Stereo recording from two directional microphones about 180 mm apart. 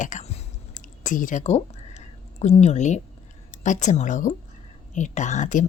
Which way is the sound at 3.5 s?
45° left (ahead or behind).